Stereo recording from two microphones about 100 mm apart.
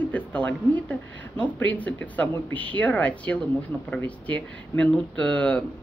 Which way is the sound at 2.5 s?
60° right (ahead or behind).